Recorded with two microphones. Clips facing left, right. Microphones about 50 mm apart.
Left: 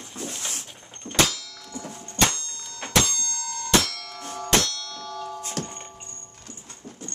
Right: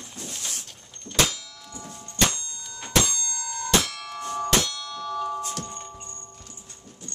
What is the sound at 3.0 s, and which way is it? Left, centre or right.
Bell, centre.